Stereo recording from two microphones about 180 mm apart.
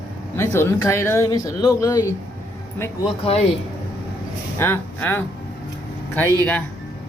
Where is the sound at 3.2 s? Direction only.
35° left (ahead or behind).